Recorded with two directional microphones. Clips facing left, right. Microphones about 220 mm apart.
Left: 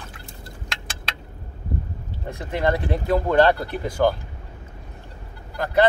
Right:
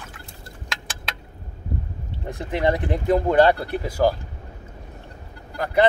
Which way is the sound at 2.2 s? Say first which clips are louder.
Right 1 dB; 15° right (ahead or behind).